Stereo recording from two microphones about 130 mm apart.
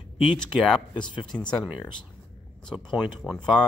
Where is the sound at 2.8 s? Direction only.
35° left (ahead or behind).